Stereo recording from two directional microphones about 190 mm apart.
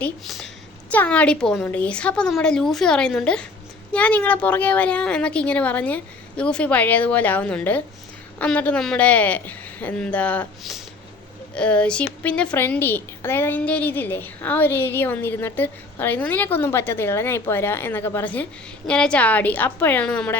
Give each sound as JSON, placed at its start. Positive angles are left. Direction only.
{"t": 0.0, "sound": "a woman's voice", "side_deg": 0}